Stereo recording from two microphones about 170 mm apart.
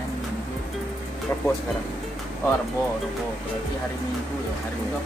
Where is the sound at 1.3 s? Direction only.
15° left (ahead or behind).